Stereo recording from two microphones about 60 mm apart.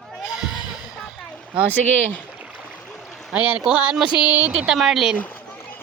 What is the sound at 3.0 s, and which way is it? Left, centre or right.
Stream, centre.